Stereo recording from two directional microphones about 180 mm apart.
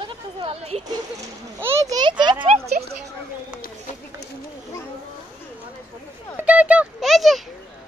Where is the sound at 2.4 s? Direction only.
35° right (ahead or behind).